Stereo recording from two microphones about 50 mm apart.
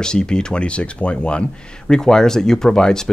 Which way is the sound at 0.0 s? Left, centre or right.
Centre.